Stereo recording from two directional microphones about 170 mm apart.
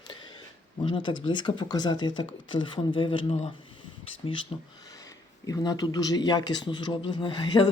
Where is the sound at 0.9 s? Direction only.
30° left (ahead or behind).